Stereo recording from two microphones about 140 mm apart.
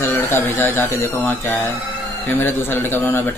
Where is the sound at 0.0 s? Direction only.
15° left (ahead or behind).